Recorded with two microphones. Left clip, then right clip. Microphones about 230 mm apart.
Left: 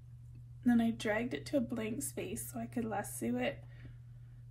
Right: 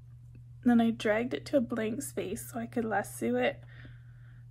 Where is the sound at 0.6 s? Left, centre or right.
Right.